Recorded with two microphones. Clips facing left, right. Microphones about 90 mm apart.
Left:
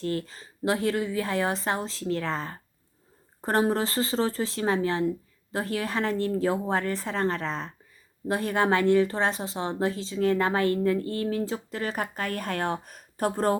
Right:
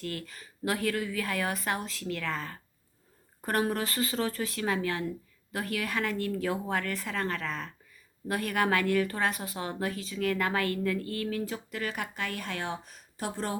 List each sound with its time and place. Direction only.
0.0 s speech: 30° left (ahead or behind); by 13.6 s 50° left (ahead or behind)